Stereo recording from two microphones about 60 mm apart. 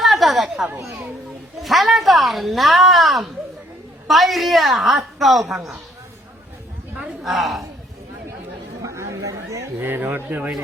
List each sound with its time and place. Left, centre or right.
0.0 s chatter: centre
1.6 s speech: centre
6.9 s a sound: centre
7.3 s speech: centre
8.8 s chatter: right
9.7 s speech: right